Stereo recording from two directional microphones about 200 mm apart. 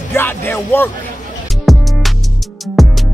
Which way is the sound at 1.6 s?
Centre (ahead or behind).